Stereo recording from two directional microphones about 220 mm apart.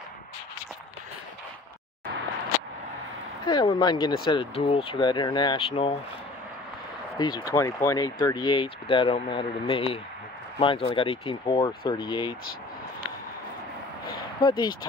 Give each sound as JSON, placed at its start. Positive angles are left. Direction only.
{"t": 3.4, "sound": "speech", "side_deg": 20}
{"t": 7.2, "sound": "speech", "side_deg": 20}
{"t": 14.4, "sound": "speech", "side_deg": 20}